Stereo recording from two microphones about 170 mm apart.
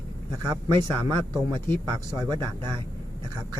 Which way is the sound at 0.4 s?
25° right (ahead or behind).